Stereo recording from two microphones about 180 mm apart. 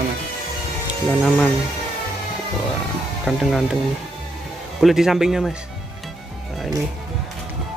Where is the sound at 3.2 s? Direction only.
Centre (ahead or behind).